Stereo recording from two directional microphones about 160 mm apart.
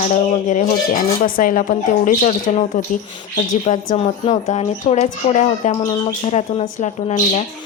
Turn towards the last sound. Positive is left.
turn(degrees=45)  # may be behind; listen again after turning